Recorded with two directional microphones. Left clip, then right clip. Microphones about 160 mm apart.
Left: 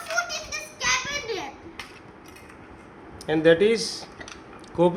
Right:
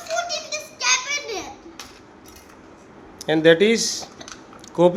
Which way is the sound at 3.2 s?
30° right (ahead or behind).